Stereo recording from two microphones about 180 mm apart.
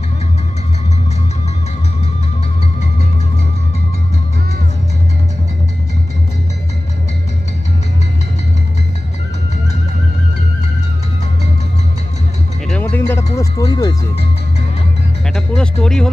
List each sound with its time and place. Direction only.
12.6 s music: 10° left (ahead or behind)
15.2 s music: 5° left (ahead or behind)